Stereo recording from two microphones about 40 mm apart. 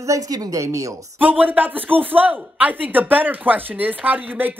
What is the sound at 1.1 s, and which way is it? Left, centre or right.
Speech, right.